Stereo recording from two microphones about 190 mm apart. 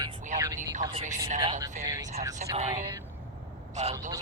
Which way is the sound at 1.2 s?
30° right (ahead or behind).